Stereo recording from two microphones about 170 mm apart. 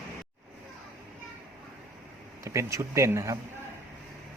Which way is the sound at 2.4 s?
15° right (ahead or behind).